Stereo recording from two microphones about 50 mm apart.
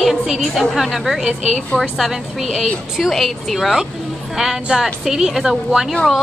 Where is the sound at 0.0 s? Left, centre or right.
Centre.